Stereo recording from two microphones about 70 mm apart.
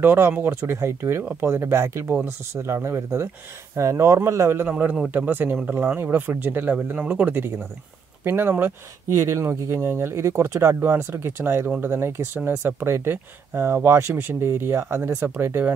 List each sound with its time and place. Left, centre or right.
0.0 s speech: right
4.6 s speech: centre
9.1 s speech: right